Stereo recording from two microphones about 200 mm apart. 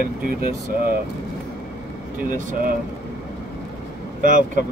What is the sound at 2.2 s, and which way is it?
Speech, 40° right (ahead or behind).